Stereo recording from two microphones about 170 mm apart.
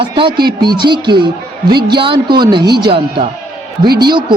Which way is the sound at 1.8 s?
30° right (ahead or behind).